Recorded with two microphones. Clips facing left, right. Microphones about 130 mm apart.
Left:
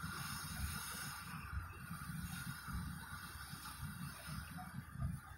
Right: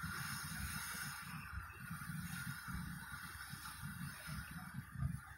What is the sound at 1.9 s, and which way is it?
Boat, 20° left (ahead or behind).